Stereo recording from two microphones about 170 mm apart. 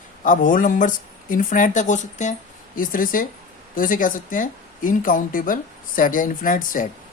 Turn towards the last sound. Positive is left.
turn(degrees=50)  # may be behind; listen again after turning